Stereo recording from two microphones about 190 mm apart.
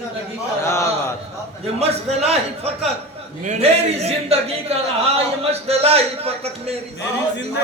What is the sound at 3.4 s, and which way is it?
A man's voice, 35° right (ahead or behind).